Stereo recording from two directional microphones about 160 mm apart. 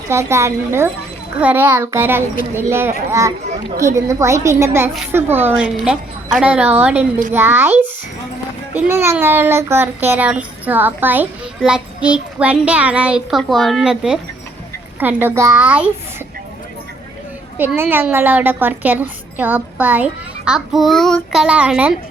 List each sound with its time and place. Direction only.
0.1 s a woman's voice: 15° right (ahead or behind)
17.7 s a woman's voice: 15° right (ahead or behind)